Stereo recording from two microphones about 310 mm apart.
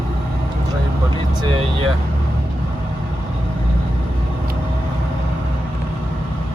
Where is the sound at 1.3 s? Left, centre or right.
Centre.